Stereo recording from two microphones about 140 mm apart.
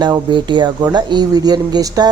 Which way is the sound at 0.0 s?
35° right (ahead or behind).